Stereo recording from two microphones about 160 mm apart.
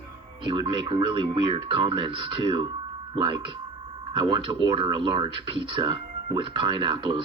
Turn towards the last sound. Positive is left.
turn(degrees=-30)  # may be behind; listen again after turning